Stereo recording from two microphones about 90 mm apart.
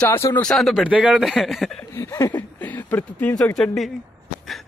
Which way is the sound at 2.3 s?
20° left (ahead or behind).